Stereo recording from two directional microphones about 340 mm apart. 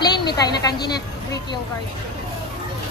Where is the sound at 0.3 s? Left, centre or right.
Centre.